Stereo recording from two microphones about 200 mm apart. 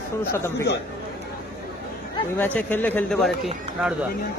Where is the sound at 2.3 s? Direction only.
10° left (ahead or behind).